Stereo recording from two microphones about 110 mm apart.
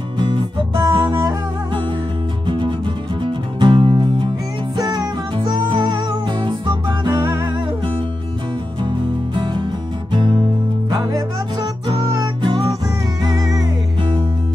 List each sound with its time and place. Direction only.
0.2 s music: 40° right (ahead or behind)
4.7 s music: 35° right (ahead or behind)
8.8 s music: 45° right (ahead or behind)
12.4 s music: 40° right (ahead or behind)